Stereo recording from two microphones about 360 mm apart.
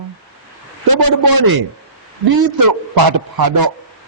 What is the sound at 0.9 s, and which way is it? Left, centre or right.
Speech, right.